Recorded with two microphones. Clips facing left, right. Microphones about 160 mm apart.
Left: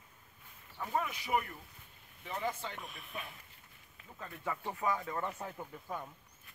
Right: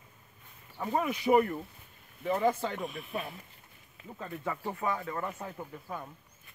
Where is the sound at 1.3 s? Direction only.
55° right (ahead or behind).